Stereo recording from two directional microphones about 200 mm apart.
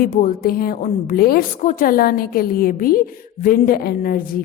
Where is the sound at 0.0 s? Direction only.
40° left (ahead or behind).